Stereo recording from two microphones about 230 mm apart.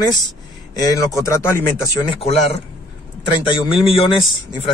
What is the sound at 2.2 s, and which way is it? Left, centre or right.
Speech, left.